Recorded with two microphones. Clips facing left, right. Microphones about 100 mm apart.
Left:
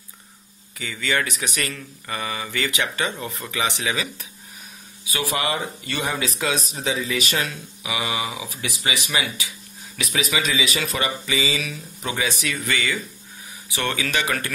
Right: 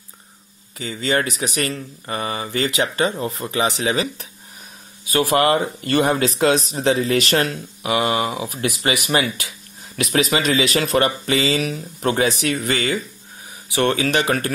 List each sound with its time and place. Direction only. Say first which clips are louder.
0.7 s speech: right 4 dB; 35° right (ahead or behind)
5.3 s speech: right 8 dB; 50° right (ahead or behind)